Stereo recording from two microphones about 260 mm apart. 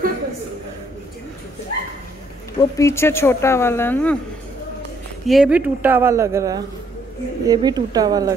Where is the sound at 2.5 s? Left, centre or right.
Centre.